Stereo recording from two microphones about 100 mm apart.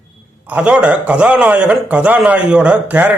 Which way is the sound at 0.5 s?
10° right (ahead or behind).